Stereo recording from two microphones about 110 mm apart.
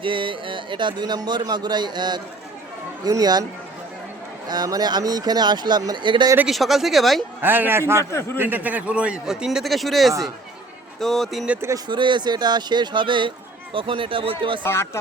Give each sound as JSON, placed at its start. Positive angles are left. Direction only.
{"t": 0.0, "sound": "speech", "side_deg": -50}
{"t": 4.4, "sound": "speech", "side_deg": -35}
{"t": 6.5, "sound": "speech", "side_deg": 0}
{"t": 7.4, "sound": "a man's voice", "side_deg": -20}
{"t": 10.1, "sound": "speech", "side_deg": -30}
{"t": 11.0, "sound": "speech", "side_deg": 0}
{"t": 11.9, "sound": "speech", "side_deg": -45}
{"t": 14.6, "sound": "speech", "side_deg": 20}